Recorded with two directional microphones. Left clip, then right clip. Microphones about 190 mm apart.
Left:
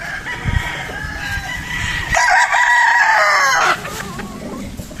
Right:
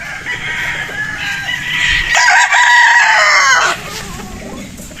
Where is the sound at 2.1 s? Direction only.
55° left (ahead or behind).